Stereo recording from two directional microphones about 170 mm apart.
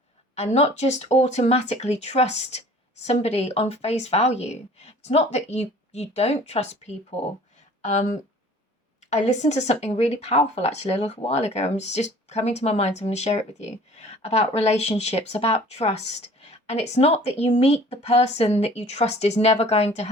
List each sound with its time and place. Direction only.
0.3 s speech: 40° left (ahead or behind)